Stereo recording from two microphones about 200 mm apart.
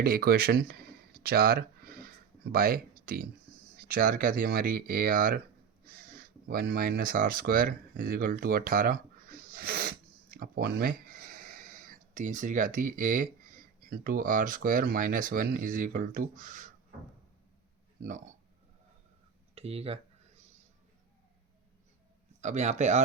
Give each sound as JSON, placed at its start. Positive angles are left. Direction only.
{"t": 0.0, "sound": "a sound", "side_deg": -50}
{"t": 3.8, "sound": "speech", "side_deg": -45}
{"t": 6.0, "sound": "a sound", "side_deg": -45}
{"t": 14.0, "sound": "speech", "side_deg": -45}
{"t": 18.0, "sound": "speech", "side_deg": -40}
{"t": 19.5, "sound": "speech", "side_deg": -30}
{"t": 22.4, "sound": "speech", "side_deg": -35}